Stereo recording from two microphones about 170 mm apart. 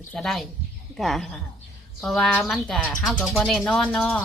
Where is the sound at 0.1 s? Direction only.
Centre (ahead or behind).